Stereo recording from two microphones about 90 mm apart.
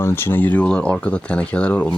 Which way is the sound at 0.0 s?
25° left (ahead or behind).